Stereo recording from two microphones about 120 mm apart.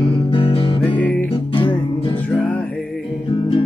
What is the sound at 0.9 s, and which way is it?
Music, 15° left (ahead or behind).